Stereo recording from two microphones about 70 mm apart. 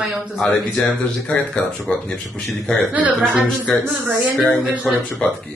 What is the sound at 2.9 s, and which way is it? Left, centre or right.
Speech, centre.